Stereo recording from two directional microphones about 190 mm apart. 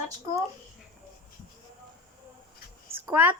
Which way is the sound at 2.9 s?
10° right (ahead or behind).